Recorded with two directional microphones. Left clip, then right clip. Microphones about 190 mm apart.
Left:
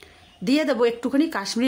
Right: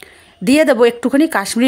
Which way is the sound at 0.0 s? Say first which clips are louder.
Right 9 dB; 40° right (ahead or behind).